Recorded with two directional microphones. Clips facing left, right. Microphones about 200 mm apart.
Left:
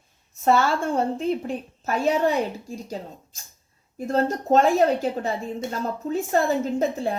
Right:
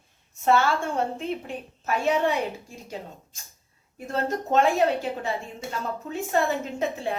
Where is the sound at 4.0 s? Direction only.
35° left (ahead or behind).